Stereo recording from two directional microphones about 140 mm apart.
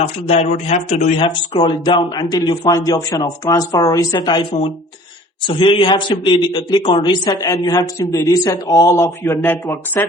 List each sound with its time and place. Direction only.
0.3 s speech: 50° left (ahead or behind)
1.2 s speech: 35° left (ahead or behind)
5.5 s speech: 40° left (ahead or behind); by 10.1 s 15° left (ahead or behind)